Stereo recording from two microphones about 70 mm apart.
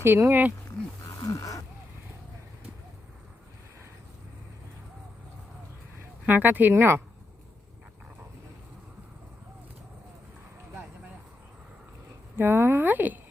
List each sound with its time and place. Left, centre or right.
0.0 s speech: right
1.1 s a sound: left
6.2 s speech: right
12.4 s speech: right